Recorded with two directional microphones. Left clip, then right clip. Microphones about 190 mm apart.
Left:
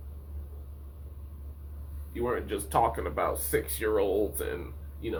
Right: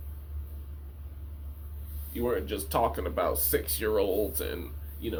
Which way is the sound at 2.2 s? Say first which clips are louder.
Right 1 dB; 50° right (ahead or behind).